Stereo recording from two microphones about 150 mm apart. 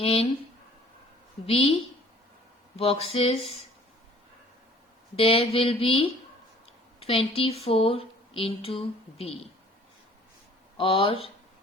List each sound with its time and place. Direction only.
0.0 s speech: 40° left (ahead or behind)
1.5 s speech: 40° left (ahead or behind)
2.7 s speech: 40° left (ahead or behind)
5.1 s speech: 40° left (ahead or behind)
10.8 s speech: 35° left (ahead or behind)